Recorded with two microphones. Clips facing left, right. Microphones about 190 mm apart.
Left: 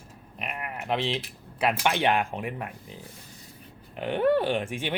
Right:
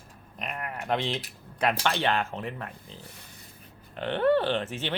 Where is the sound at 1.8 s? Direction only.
15° left (ahead or behind).